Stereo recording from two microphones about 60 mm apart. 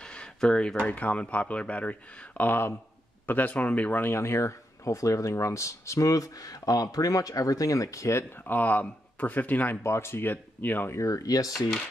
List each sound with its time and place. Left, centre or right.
0.0 s a sound: centre
0.9 s speech: left
4.1 s speech: left
8.3 s speech: left
9.8 s speech: left
10.9 s speech: left